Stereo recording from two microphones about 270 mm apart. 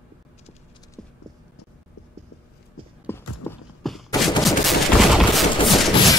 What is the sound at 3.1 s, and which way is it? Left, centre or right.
Clip-clop, centre.